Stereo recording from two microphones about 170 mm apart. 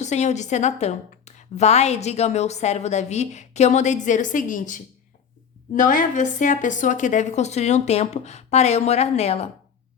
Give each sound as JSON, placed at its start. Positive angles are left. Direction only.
{"t": 0.0, "sound": "a woman's voice", "side_deg": 40}